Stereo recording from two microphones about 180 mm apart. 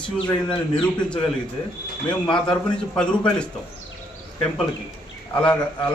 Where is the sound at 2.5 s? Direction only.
5° left (ahead or behind).